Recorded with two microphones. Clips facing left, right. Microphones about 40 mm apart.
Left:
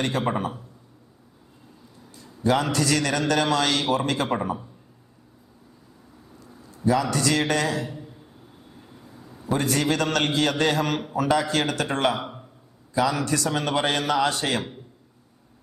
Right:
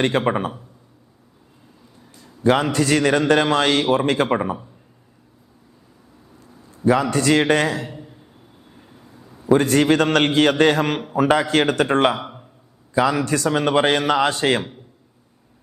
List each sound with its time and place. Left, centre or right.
0.0 s a man's voice: right
2.4 s a man's voice: right
6.8 s a man's voice: right
8.7 s a sound: centre
9.5 s a man's voice: right